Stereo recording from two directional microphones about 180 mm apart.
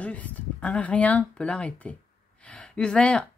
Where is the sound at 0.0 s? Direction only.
10° left (ahead or behind).